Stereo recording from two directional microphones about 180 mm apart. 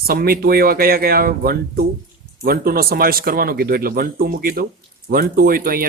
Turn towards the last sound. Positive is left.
turn(degrees=-55)  # may be behind; listen again after turning